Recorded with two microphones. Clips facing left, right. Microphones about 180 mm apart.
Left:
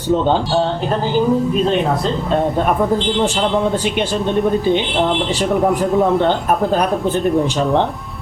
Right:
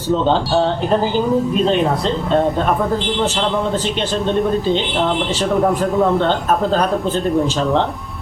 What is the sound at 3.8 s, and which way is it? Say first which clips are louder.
Speech: left 1 dB; 10° left (ahead or behind).